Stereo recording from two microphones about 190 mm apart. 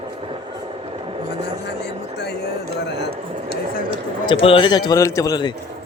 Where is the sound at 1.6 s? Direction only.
60° left (ahead or behind).